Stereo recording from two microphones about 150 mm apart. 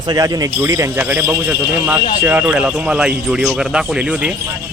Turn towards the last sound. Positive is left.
turn(degrees=-5)  # may be behind; listen again after turning